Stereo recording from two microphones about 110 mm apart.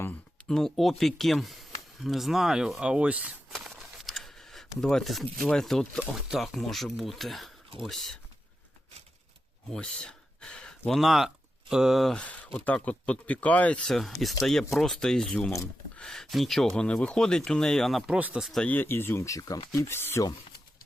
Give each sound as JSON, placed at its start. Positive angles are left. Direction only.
{"t": 0.0, "sound": "speech", "side_deg": 15}
{"t": 3.5, "sound": "a sound", "side_deg": 0}
{"t": 5.4, "sound": "speech", "side_deg": 5}
{"t": 9.6, "sound": "speech", "side_deg": 5}
{"t": 12.5, "sound": "speech", "side_deg": 10}
{"t": 18.4, "sound": "speech", "side_deg": 5}
{"t": 18.7, "sound": "speech", "side_deg": 20}
{"t": 19.7, "sound": "speech", "side_deg": 20}